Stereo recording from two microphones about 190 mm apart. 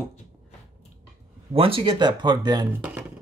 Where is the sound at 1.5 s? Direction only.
30° right (ahead or behind).